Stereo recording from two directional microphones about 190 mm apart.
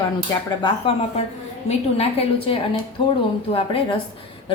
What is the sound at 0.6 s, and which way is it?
A woman's voice, 30° left (ahead or behind).